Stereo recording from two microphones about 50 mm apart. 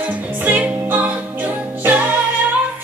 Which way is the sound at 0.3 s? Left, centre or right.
Right.